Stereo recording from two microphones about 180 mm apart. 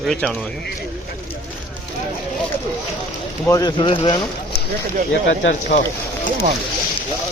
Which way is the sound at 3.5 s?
20° left (ahead or behind).